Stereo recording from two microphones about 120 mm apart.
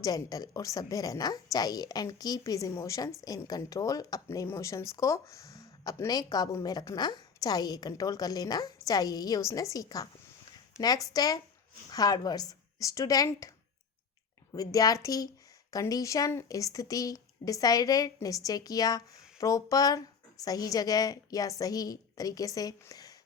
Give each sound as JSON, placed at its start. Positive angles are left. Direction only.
{"t": 0.0, "sound": "speech", "side_deg": 30}
{"t": 14.5, "sound": "a woman's voice", "side_deg": 30}